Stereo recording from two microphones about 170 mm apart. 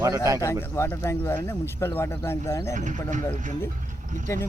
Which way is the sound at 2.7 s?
45° right (ahead or behind).